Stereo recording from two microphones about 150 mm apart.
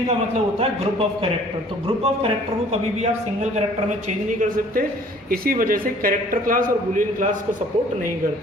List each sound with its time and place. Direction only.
0.6 s speech: 40° right (ahead or behind)
3.0 s speech: 50° right (ahead or behind)
4.4 s a man's voice: 70° right (ahead or behind)